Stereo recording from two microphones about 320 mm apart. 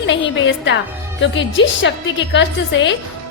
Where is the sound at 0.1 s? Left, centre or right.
Left.